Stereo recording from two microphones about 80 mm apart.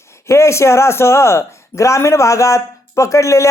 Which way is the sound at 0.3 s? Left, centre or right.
Left.